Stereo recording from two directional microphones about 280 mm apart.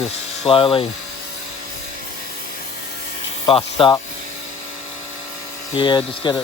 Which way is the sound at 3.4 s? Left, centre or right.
Centre.